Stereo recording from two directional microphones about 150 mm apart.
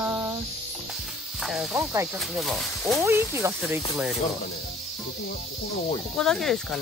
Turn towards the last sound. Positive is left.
turn(degrees=0)  # may be behind; listen again after turning